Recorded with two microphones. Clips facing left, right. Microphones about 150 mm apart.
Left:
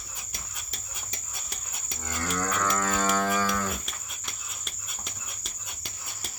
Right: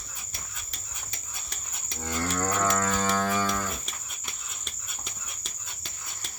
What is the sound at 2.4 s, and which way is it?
Livestock, 25° right (ahead or behind).